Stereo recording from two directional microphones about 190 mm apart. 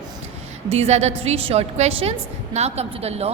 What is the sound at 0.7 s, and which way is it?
A woman's voice, 35° right (ahead or behind).